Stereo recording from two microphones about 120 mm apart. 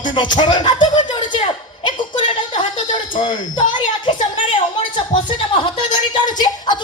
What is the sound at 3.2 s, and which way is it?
Speech, 40° left (ahead or behind).